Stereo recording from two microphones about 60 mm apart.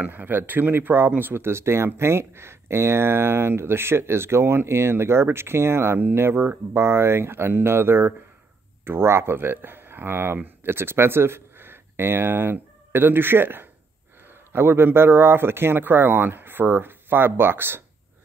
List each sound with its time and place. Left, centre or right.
0.0 s speech: right